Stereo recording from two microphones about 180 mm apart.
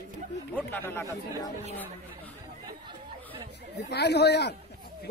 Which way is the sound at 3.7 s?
70° left (ahead or behind).